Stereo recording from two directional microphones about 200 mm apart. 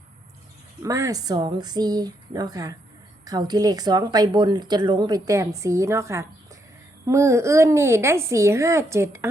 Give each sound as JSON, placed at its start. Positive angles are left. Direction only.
{"t": 0.8, "sound": "a woman's voice", "side_deg": -15}